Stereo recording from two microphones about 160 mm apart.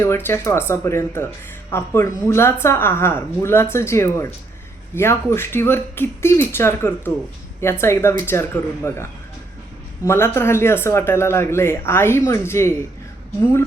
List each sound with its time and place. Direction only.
0.0 s speech: 15° left (ahead or behind)
10.1 s speech: 15° left (ahead or behind)